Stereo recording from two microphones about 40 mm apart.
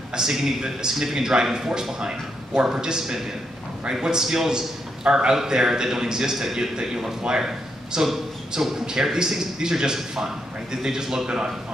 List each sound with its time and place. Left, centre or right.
0.1 s a man's voice: centre